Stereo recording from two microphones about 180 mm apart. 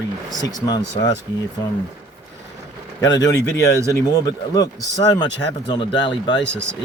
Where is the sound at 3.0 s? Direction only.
20° left (ahead or behind).